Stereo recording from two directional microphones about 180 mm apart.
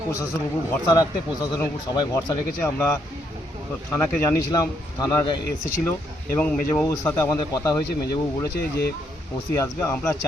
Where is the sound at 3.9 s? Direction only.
10° left (ahead or behind).